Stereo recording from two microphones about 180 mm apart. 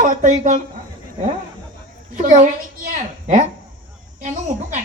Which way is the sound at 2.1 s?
45° right (ahead or behind).